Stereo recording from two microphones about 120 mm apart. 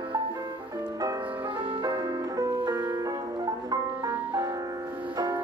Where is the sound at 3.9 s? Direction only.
10° right (ahead or behind).